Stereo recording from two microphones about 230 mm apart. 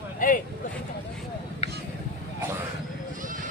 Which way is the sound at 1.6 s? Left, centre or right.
Left.